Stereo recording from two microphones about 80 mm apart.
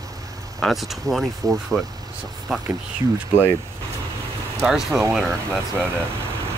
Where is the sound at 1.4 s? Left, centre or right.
Right.